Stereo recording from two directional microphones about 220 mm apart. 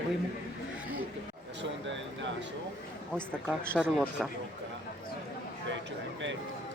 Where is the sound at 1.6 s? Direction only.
55° right (ahead or behind).